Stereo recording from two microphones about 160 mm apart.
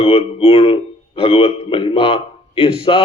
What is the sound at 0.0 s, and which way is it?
A man's voice, 35° left (ahead or behind).